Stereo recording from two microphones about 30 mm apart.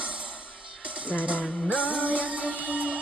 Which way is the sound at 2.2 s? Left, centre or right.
Right.